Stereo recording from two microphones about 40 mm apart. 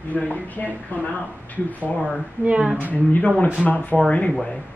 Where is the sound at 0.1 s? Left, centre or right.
Left.